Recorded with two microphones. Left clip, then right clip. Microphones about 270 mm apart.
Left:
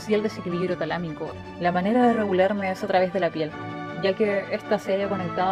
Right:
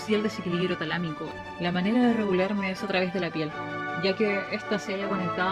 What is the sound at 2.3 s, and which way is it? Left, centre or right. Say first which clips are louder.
Speech: left 5 dB; left.